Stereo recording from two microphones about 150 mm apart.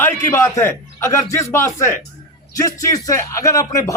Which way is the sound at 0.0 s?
15° left (ahead or behind).